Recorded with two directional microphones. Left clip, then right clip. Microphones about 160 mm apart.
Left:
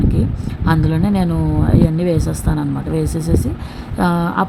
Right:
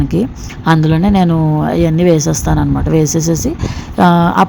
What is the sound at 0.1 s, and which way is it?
Speech, 35° right (ahead or behind).